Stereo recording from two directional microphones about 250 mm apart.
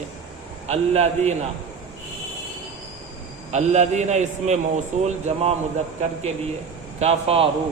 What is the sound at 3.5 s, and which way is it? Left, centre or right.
A man's voice, right.